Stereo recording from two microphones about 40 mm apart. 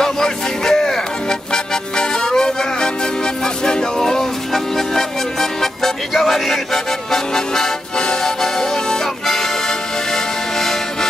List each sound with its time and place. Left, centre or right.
0.0 s music: centre
10.1 s accordion: centre